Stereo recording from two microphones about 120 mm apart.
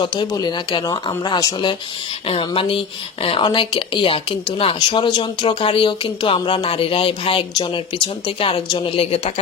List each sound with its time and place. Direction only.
0.0 s speech: 40° left (ahead or behind)
2.2 s a woman's voice: 45° left (ahead or behind)